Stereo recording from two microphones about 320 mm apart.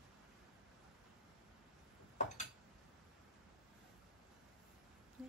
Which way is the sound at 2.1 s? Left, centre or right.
Left.